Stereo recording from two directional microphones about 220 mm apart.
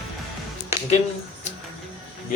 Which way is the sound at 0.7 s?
10° right (ahead or behind).